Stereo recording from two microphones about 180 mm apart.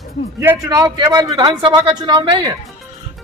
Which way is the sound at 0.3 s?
15° right (ahead or behind).